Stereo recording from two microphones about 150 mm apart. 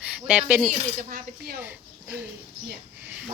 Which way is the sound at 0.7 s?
65° right (ahead or behind).